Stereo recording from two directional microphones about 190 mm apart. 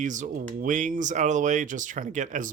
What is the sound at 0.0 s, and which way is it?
Speech, 40° right (ahead or behind).